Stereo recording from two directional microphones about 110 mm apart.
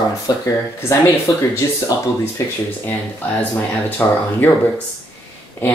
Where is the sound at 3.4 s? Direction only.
15° left (ahead or behind).